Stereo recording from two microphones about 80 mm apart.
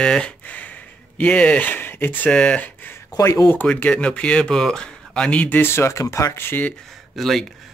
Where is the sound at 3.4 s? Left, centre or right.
Left.